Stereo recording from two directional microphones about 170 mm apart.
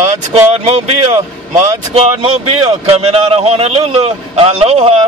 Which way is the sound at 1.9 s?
35° right (ahead or behind).